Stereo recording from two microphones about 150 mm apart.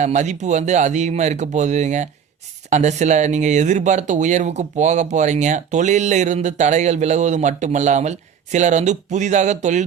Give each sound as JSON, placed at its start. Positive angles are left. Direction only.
{"t": 0.0, "sound": "speech", "side_deg": -50}